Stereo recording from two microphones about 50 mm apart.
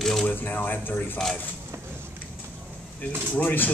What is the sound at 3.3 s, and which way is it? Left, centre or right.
Speech, left.